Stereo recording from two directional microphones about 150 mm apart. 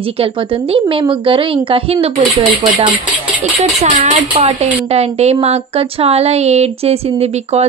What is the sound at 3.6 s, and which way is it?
Speech, 45° right (ahead or behind).